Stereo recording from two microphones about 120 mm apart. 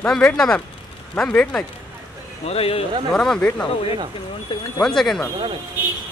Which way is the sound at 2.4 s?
55° left (ahead or behind).